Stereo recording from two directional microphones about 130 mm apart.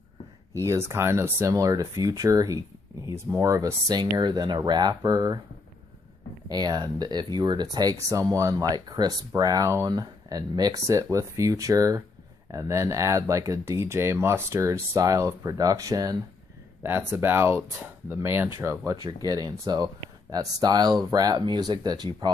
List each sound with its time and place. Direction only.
0.7 s speech: 20° right (ahead or behind)
6.5 s speech: 30° right (ahead or behind)
16.8 s speech: 15° right (ahead or behind); by 22.3 s 35° right (ahead or behind)